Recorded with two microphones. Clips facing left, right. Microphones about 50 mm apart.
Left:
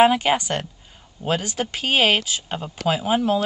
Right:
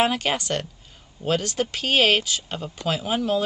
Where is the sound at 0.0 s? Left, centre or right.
Centre.